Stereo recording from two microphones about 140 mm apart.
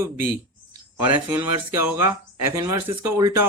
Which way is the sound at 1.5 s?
15° right (ahead or behind).